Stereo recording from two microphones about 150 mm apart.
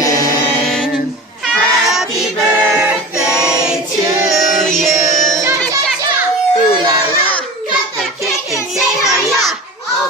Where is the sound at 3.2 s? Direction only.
5° right (ahead or behind).